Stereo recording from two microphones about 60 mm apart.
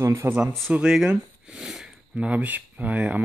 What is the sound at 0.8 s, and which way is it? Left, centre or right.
Speech, centre.